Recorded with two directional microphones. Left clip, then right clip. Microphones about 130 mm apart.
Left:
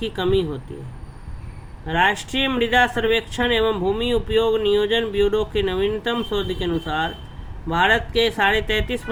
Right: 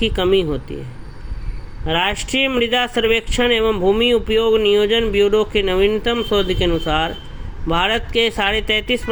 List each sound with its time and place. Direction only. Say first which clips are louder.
0.0 s speech: right 5 dB; 30° right (ahead or behind)
1.9 s speech: right 1 dB; 30° right (ahead or behind)